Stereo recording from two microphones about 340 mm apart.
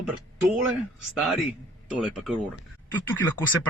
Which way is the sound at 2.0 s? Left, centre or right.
Centre.